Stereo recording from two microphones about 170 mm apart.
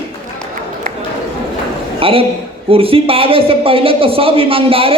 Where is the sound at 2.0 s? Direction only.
35° right (ahead or behind).